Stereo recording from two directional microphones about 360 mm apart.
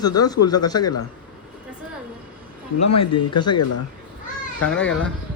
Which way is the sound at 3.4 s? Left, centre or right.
Left.